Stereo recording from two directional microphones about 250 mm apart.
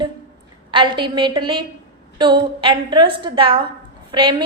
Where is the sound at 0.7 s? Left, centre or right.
Centre.